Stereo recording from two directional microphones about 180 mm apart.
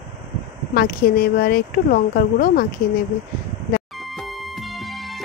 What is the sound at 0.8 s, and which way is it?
Speech, 55° left (ahead or behind).